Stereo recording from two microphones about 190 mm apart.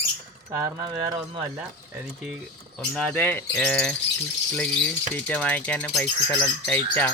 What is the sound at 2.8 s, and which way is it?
Speech, 5° left (ahead or behind).